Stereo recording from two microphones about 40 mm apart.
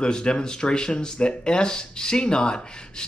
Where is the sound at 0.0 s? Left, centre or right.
Left.